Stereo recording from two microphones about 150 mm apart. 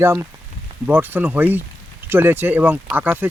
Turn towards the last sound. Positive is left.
turn(degrees=-10)  # may be behind; listen again after turning